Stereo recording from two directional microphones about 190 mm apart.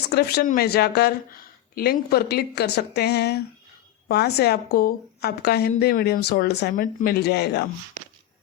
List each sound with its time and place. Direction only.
0.1 s speech: 55° left (ahead or behind)